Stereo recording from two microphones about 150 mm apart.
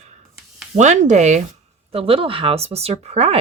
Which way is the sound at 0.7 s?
50° right (ahead or behind).